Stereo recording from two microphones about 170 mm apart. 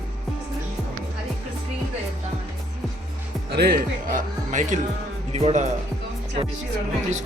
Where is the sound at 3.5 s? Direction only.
65° right (ahead or behind); by 5.7 s 40° right (ahead or behind).